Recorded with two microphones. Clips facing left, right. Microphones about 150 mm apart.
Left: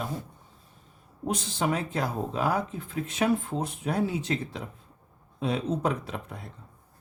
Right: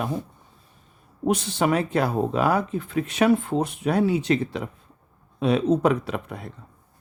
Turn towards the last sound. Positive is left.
turn(degrees=-70)  # may be behind; listen again after turning